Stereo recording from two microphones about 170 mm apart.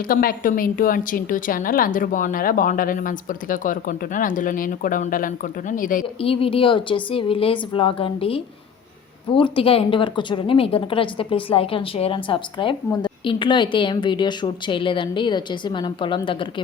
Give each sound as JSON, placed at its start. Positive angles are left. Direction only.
{"t": 0.1, "sound": "a woman's voice", "side_deg": 55}
{"t": 6.1, "sound": "a woman's voice", "side_deg": 35}